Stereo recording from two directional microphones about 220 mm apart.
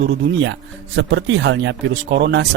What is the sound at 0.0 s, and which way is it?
Speech, 60° right (ahead or behind).